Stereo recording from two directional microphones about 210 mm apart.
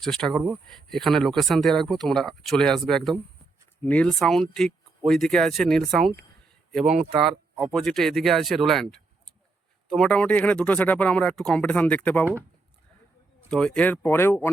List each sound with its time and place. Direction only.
0.0 s speech: centre (ahead or behind)
6.9 s speech: 30° right (ahead or behind)
7.3 s speech: centre (ahead or behind)
13.5 s speech: 5° left (ahead or behind)